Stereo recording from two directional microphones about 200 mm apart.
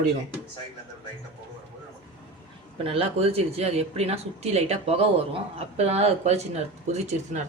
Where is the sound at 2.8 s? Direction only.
30° right (ahead or behind).